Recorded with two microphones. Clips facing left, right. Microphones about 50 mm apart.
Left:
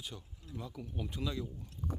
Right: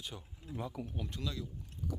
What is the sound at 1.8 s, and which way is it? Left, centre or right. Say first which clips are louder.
Chewing: even; left.